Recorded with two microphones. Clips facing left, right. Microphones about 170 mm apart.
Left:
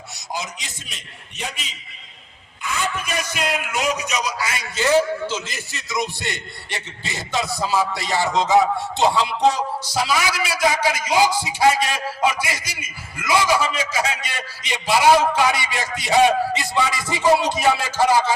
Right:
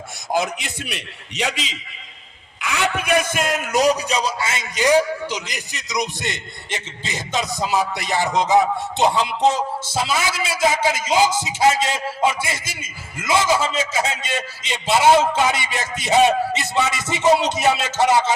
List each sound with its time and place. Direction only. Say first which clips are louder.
0.3 s a man's voice: right 9 dB; 60° right (ahead or behind); by 18.3 s 20° right (ahead or behind)